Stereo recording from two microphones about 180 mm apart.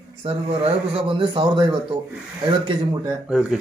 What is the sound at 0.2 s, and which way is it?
A man's voice, 35° right (ahead or behind).